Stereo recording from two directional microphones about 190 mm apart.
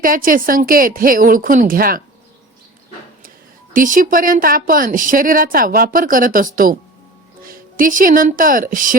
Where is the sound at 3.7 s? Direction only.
45° right (ahead or behind).